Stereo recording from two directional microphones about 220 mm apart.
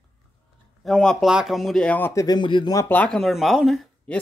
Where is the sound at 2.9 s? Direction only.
5° left (ahead or behind).